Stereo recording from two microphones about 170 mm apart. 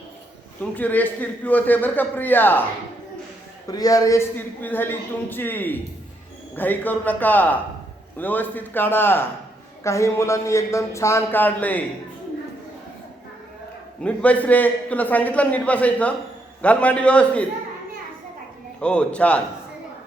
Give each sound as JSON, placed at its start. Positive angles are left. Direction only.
{"t": 0.6, "sound": "a man's voice", "side_deg": 10}
{"t": 3.7, "sound": "a man's voice", "side_deg": 20}
{"t": 14.0, "sound": "a man's voice", "side_deg": 5}
{"t": 18.8, "sound": "a man's voice", "side_deg": 5}